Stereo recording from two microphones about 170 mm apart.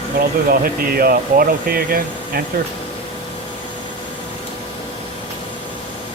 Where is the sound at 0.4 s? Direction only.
60° right (ahead or behind).